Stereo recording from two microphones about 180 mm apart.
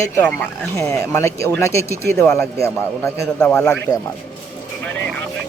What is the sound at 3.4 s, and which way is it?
Speech, 5° left (ahead or behind).